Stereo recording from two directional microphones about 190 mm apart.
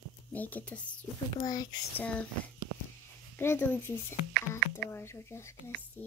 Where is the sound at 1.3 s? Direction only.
20° left (ahead or behind).